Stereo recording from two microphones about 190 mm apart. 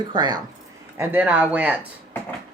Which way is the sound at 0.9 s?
10° right (ahead or behind).